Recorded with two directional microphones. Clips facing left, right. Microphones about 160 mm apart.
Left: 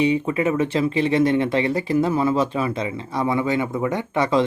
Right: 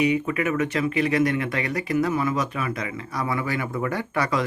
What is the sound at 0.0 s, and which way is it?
Speech, 30° left (ahead or behind).